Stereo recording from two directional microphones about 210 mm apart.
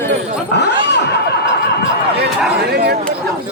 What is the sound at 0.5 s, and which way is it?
Speech, 55° left (ahead or behind).